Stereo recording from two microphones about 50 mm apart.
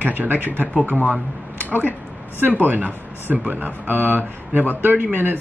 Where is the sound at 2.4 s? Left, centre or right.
Right.